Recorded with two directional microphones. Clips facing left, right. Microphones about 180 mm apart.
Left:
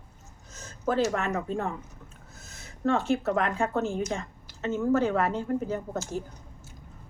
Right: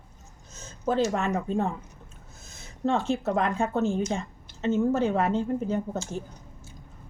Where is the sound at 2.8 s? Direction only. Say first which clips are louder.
Even; 20° right (ahead or behind).